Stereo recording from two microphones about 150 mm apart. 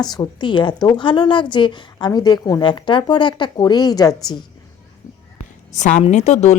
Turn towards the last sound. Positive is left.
turn(degrees=50)  # may be behind; listen again after turning